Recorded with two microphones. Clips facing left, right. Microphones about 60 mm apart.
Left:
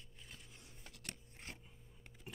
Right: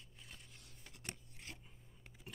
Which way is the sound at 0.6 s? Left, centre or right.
Left.